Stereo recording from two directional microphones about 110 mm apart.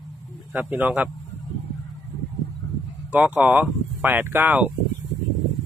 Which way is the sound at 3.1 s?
10° right (ahead or behind).